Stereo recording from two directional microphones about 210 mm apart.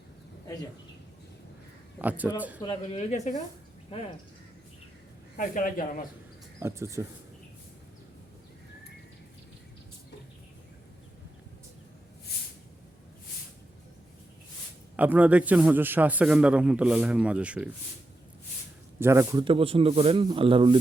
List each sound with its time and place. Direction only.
2.0 s a man's voice: 10° right (ahead or behind)
2.6 s speech: 25° left (ahead or behind)
5.4 s speech: 40° left (ahead or behind)
6.6 s a man's voice: 15° right (ahead or behind)
14.9 s a man's voice: 10° right (ahead or behind)
18.9 s speech: 10° right (ahead or behind)